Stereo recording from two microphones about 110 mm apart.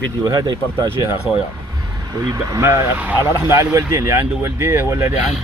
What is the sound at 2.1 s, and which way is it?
Speech, 30° right (ahead or behind).